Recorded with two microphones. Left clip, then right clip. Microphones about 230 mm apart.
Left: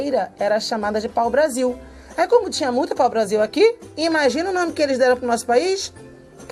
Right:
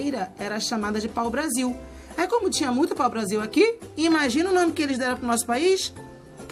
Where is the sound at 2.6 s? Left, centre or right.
Right.